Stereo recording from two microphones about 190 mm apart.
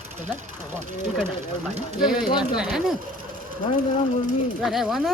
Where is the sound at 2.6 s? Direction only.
5° right (ahead or behind).